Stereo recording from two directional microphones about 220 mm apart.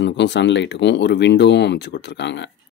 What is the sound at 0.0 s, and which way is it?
Speech, 50° left (ahead or behind).